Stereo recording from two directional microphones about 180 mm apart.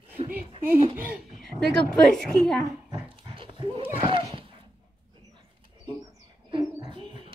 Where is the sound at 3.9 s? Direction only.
30° right (ahead or behind).